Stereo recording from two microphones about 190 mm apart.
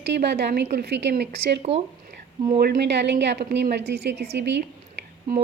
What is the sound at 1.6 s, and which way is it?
Speech, 30° right (ahead or behind).